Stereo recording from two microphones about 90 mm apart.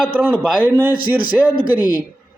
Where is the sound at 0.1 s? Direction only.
15° right (ahead or behind).